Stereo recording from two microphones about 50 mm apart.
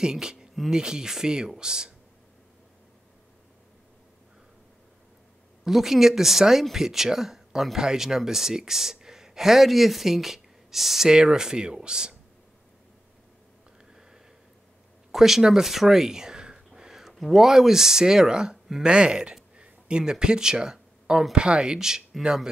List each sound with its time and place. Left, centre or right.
0.0 s speech: centre
5.6 s speech: centre
15.0 s a sound: centre
17.1 s speech: centre